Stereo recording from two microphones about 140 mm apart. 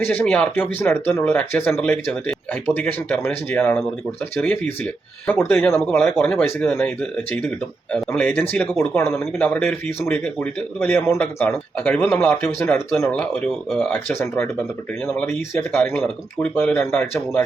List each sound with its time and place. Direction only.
0.0 s speech: 10° left (ahead or behind)